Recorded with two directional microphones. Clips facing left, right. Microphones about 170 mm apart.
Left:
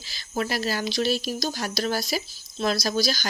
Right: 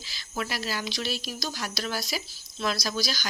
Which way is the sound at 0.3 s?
40° left (ahead or behind).